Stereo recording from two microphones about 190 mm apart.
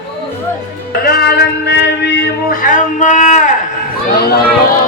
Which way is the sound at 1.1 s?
55° left (ahead or behind).